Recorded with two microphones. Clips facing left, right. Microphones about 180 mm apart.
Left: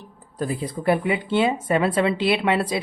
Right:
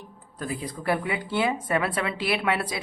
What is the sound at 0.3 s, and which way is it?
Speech, 30° left (ahead or behind).